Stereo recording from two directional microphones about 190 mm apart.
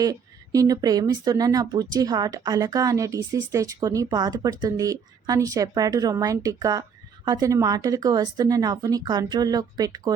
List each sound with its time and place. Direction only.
0.0 s speech: 20° right (ahead or behind)